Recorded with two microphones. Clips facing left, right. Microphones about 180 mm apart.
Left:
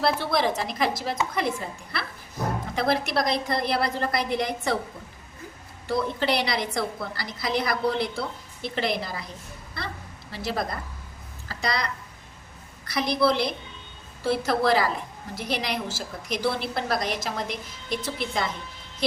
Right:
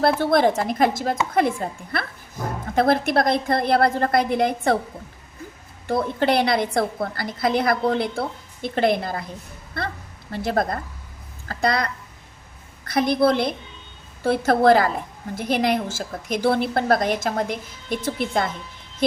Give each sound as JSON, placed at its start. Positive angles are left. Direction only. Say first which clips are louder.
{"t": 0.0, "sound": "a woman's voice", "louder": "right 6 dB", "side_deg": -50}
{"t": 5.9, "sound": "a woman's voice", "louder": "right 4 dB", "side_deg": -55}
{"t": 10.3, "sound": "a woman's voice", "louder": "right 6 dB", "side_deg": -55}
{"t": 12.9, "sound": "a woman's voice", "louder": "right 5 dB", "side_deg": -50}